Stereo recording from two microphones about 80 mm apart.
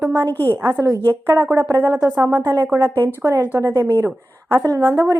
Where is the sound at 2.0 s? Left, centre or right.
Right.